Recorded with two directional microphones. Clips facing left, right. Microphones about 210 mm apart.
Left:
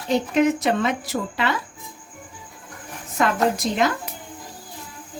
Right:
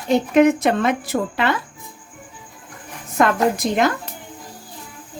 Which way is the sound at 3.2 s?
50° right (ahead or behind).